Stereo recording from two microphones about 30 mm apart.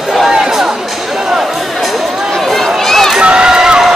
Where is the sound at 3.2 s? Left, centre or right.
Right.